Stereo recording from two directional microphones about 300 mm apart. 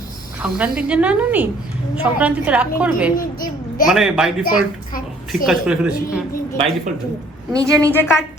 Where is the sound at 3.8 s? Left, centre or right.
Centre.